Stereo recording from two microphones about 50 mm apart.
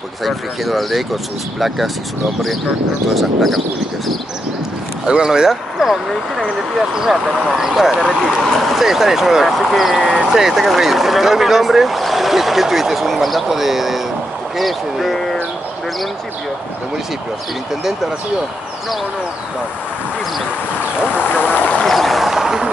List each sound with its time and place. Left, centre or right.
0.2 s speech: centre
3.2 s speech: centre
5.0 s speech: centre
21.1 s boat: left
21.8 s a sound: centre